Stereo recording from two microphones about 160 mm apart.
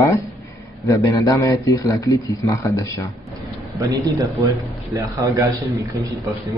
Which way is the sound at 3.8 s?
20° right (ahead or behind).